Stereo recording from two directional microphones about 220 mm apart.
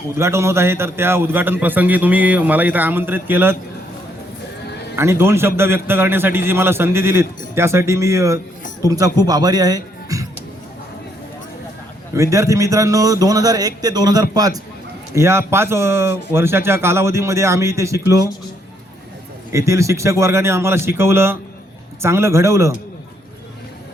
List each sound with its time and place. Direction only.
0.2 s a man's voice: 10° right (ahead or behind)
4.9 s a man's voice: 10° right (ahead or behind)
12.1 s a man's voice: 15° right (ahead or behind)
19.5 s a man's voice: 15° right (ahead or behind)